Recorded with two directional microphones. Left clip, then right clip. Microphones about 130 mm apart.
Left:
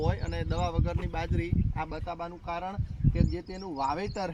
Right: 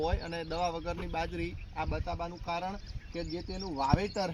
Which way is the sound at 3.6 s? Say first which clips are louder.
Left 2 dB; 10° left (ahead or behind).